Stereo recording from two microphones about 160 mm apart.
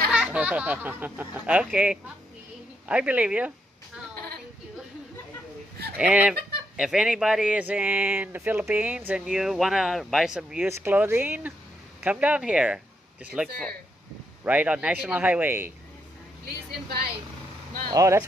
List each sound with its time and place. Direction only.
0.1 s speech: 5° right (ahead or behind)
5.9 s speech: 5° right (ahead or behind)
16.4 s speech: 75° right (ahead or behind)
17.9 s speech: 20° right (ahead or behind)